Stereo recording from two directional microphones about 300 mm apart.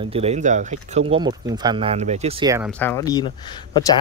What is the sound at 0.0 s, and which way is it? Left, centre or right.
Speech, centre.